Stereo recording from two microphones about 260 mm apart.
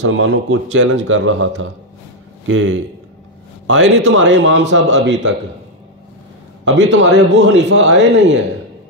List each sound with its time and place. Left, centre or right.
0.0 s a man's voice: right
6.6 s a man's voice: right